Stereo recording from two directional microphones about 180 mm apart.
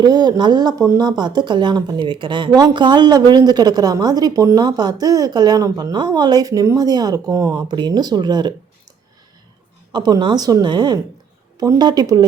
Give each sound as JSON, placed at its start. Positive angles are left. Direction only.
{"t": 0.0, "sound": "speech", "side_deg": -20}
{"t": 9.9, "sound": "speech", "side_deg": -25}